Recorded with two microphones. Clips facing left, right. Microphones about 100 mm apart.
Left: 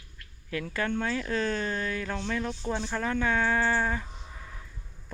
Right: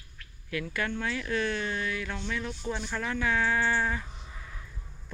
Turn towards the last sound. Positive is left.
turn(degrees=35)  # may be behind; listen again after turning